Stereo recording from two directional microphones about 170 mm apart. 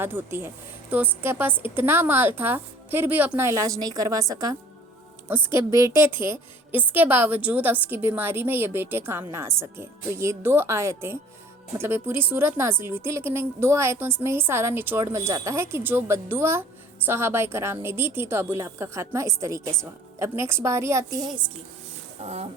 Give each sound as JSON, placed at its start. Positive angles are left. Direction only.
{"t": 0.0, "sound": "a woman's voice", "side_deg": -10}
{"t": 22.2, "sound": "speech", "side_deg": -40}